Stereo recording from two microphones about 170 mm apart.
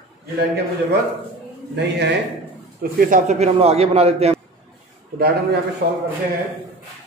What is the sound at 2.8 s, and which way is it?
A man's voice, 55° right (ahead or behind).